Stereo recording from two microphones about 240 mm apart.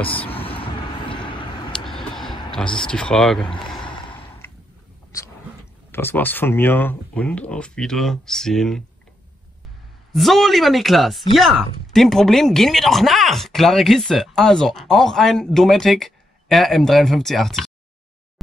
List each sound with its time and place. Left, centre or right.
0.3 s vehicle: left
1.7 s vehicle: centre
2.9 s speech: centre
3.4 s speech: centre
3.8 s a sound: centre
5.9 s speech: centre
10.1 s speech: centre